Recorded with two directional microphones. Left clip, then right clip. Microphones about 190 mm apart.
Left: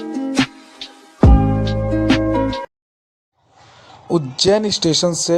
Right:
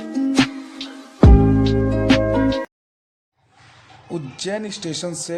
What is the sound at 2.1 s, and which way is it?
Music, centre (ahead or behind).